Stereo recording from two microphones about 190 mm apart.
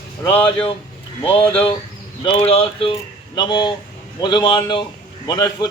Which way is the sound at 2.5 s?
30° left (ahead or behind).